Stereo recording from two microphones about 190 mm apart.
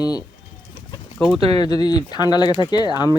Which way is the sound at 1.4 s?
30° right (ahead or behind).